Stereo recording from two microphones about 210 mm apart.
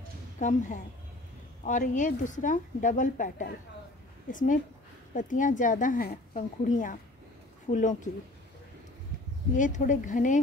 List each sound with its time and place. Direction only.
0.4 s a woman's voice: 35° left (ahead or behind)
9.6 s a woman's voice: 40° left (ahead or behind)